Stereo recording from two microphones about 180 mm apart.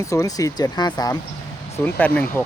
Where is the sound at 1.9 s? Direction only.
10° left (ahead or behind).